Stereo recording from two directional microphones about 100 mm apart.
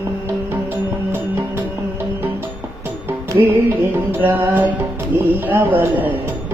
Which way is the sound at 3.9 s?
20° right (ahead or behind).